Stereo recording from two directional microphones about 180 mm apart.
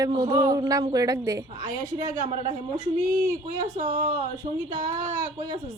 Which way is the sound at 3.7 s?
40° right (ahead or behind).